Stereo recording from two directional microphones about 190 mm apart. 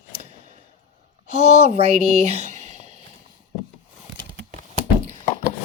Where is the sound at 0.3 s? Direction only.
40° right (ahead or behind).